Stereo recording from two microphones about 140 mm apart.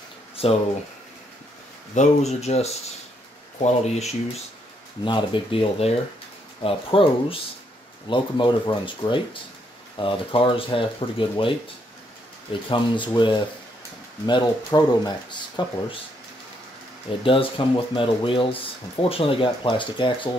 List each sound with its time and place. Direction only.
0.4 s speech: 45° left (ahead or behind)
2.0 s speech: 50° left (ahead or behind)
5.0 s speech: 35° left (ahead or behind)
12.6 s speech: 35° left (ahead or behind)
17.2 s speech: 40° left (ahead or behind)